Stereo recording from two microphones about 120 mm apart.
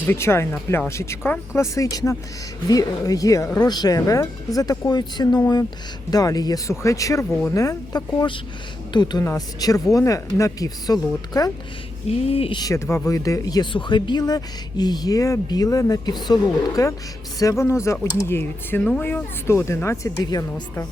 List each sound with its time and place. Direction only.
0.0 s speech: 20° left (ahead or behind)
12.0 s speech: 55° left (ahead or behind)
12.5 s speech: 25° left (ahead or behind)